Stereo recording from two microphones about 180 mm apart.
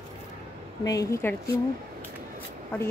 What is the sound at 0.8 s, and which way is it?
Speech, 20° left (ahead or behind).